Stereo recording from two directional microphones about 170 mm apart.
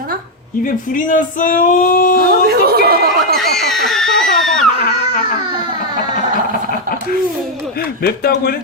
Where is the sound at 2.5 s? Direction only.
65° right (ahead or behind).